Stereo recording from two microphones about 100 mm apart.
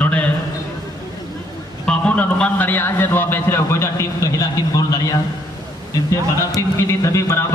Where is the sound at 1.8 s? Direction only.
15° left (ahead or behind); by 5.2 s 35° left (ahead or behind).